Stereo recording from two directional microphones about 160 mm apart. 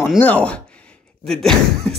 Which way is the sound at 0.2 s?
10° left (ahead or behind).